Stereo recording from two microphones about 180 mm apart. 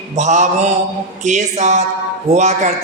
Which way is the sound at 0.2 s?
40° right (ahead or behind).